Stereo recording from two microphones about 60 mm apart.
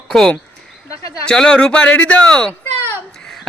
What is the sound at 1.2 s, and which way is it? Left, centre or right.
Speech, centre.